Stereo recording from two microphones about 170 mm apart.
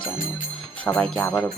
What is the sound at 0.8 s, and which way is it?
Music, 10° left (ahead or behind).